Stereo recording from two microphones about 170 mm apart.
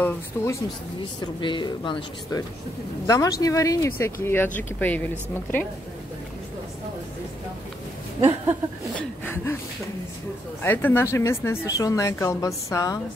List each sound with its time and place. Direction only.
0.3 s speech: 15° left (ahead or behind)
1.2 s speech: 25° left (ahead or behind); by 5.7 s 10° left (ahead or behind)
8.9 s speech: 10° left (ahead or behind)
10.6 s speech: 10° left (ahead or behind)